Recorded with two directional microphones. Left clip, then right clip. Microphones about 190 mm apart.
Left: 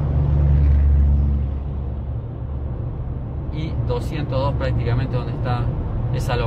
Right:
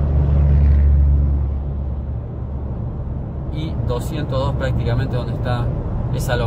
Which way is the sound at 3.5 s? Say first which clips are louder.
Right 1 dB; 25° right (ahead or behind).